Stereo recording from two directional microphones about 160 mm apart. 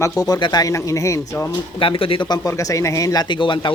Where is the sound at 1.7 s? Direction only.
30° left (ahead or behind).